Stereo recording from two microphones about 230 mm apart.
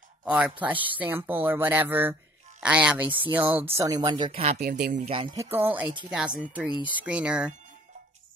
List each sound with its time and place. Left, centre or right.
0.2 s speech: centre; by 4.6 s right
4.6 s speech: right
5.0 s speech: right
5.3 s speech: centre